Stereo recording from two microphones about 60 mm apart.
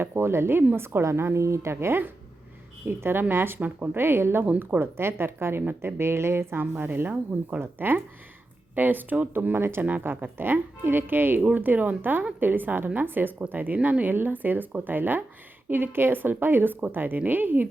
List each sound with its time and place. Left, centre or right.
0.0 s a woman's voice: right
13.7 s speech: centre
14.0 s speech: right